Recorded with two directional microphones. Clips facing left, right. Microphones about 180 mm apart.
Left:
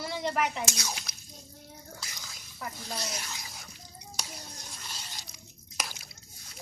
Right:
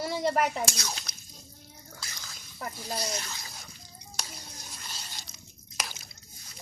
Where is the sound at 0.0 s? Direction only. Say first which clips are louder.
Right 3 dB; 40° right (ahead or behind).